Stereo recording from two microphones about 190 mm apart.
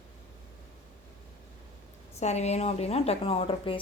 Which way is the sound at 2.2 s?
35° left (ahead or behind).